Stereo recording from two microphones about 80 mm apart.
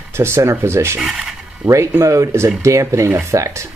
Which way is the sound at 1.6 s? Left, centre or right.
Right.